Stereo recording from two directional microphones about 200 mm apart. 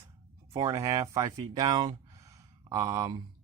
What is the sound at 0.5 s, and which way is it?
Speech, 20° right (ahead or behind).